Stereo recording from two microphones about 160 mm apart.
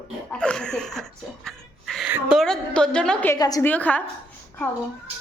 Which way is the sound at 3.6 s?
10° left (ahead or behind).